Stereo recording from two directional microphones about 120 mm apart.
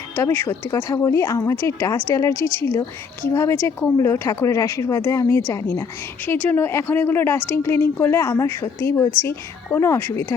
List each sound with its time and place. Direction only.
0.2 s a woman's voice: 20° left (ahead or behind)